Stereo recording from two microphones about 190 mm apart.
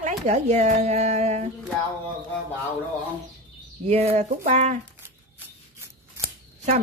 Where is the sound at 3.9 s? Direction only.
35° right (ahead or behind).